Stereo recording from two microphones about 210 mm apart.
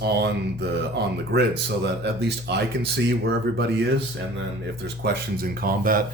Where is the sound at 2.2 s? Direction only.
50° right (ahead or behind).